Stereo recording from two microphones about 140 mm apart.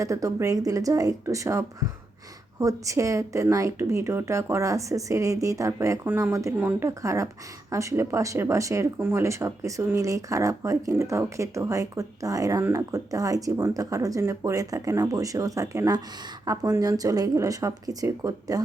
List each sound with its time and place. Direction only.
0.0 s speech: 25° right (ahead or behind)